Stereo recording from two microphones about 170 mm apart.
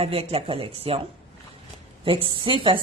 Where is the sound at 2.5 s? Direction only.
30° right (ahead or behind).